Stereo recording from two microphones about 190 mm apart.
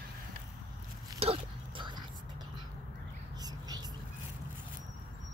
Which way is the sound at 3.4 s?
20° right (ahead or behind).